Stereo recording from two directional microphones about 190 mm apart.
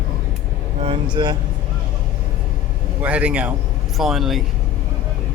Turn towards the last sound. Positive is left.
turn(degrees=0)  # may be behind; listen again after turning